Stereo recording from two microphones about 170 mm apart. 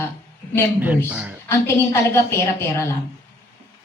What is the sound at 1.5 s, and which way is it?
A woman's voice, 15° left (ahead or behind).